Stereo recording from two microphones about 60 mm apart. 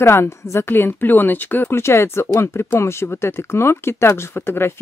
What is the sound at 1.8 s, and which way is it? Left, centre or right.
Speech, left.